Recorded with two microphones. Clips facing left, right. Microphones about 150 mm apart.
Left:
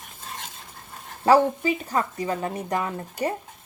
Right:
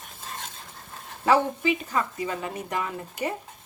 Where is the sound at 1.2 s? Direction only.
40° left (ahead or behind).